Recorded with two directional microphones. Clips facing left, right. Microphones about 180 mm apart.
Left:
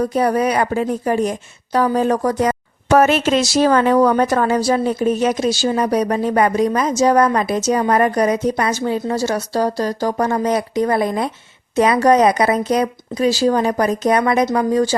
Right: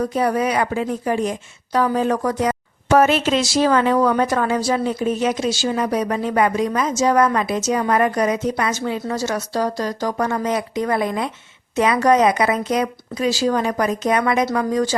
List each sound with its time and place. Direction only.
0.0 s a woman's voice: 35° left (ahead or behind)